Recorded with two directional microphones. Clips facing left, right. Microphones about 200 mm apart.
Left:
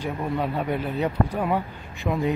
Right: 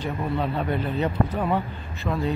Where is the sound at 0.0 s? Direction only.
10° left (ahead or behind).